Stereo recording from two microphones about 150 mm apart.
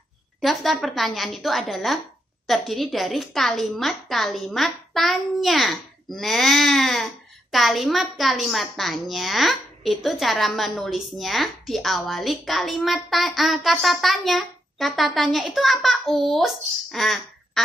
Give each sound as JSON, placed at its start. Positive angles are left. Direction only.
{"t": 0.4, "sound": "a woman's voice", "side_deg": 0}